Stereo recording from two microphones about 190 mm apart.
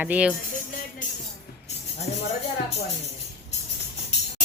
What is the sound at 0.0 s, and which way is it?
Speech, 5° right (ahead or behind).